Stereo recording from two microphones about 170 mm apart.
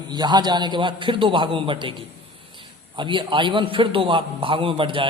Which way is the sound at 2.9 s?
30° right (ahead or behind).